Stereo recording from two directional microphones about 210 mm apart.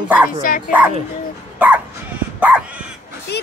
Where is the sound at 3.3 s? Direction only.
50° left (ahead or behind).